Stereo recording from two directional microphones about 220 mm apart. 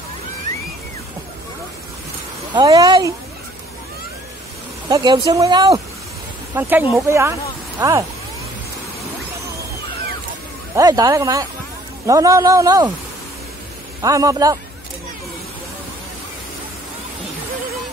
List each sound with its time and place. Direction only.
2.5 s speech: 15° right (ahead or behind)
4.8 s speech: 20° right (ahead or behind)
10.7 s speech: 15° right (ahead or behind)
14.0 s speech: 15° right (ahead or behind)